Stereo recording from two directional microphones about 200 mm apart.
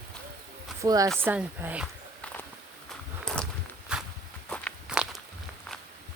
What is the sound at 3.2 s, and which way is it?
Walk, 5° left (ahead or behind).